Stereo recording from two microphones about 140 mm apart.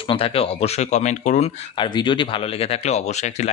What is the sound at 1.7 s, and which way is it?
Speech, 35° left (ahead or behind).